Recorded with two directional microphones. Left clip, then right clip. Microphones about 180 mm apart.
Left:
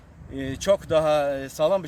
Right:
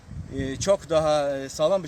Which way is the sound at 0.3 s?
10° left (ahead or behind).